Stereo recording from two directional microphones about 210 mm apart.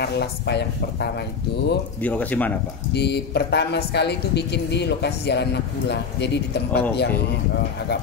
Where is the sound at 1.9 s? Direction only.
10° left (ahead or behind).